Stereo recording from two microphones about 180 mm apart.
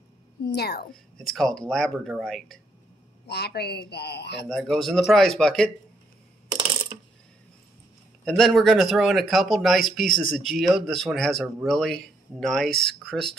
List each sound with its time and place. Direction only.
0.5 s speech: 65° left (ahead or behind)
1.1 s speech: centre (ahead or behind)
3.3 s speech: 65° left (ahead or behind)
4.5 s speech: centre (ahead or behind)
6.9 s mechanisms: 20° right (ahead or behind)
8.3 s speech: centre (ahead or behind)